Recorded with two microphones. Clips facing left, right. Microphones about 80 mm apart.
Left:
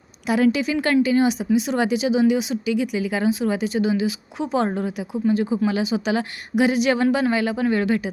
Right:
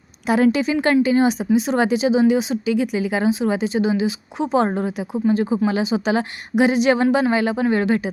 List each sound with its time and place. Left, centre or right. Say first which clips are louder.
0.3 s a woman's voice: right 2 dB; right